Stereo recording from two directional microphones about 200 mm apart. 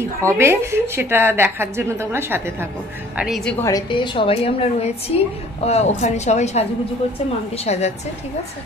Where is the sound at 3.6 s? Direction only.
20° left (ahead or behind).